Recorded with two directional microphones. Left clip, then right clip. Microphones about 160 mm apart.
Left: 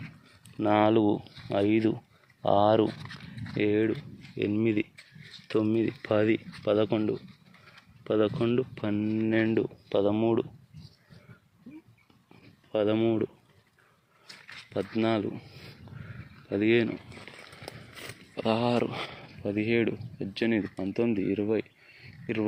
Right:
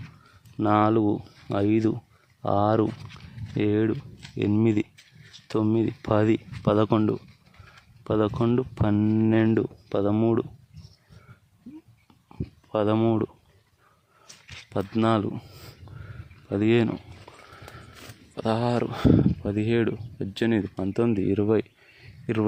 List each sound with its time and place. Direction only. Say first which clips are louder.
0.6 s speech: right 2 dB; 30° right (ahead or behind)
5.5 s speech: right 2 dB; 30° right (ahead or behind); by 7.2 s 55° right (ahead or behind)
8.0 s speech: right 2 dB; 35° right (ahead or behind)
12.7 s speech: right 3 dB; 45° right (ahead or behind)
14.4 s a sound: right 3 dB; 55° right (ahead or behind)
16.5 s speech: right 2 dB; 45° right (ahead or behind)
18.3 s speech: right 1 dB; 45° right (ahead or behind); by 22.4 s 65° right (ahead or behind)